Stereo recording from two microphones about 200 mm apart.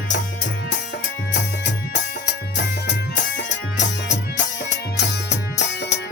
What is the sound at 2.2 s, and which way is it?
Music, 55° left (ahead or behind).